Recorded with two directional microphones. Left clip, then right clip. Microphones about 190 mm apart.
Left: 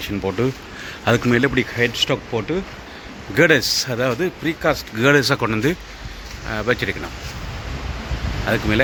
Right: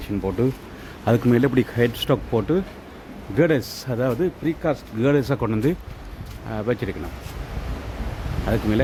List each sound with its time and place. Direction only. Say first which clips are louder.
0.0 s speech: left 2 dB; 5° right (ahead or behind)
1.5 s speech: left 3 dB; 35° right (ahead or behind)
3.3 s speech: left 6 dB; 5° right (ahead or behind)
8.5 s speech: left 4 dB; 10° right (ahead or behind)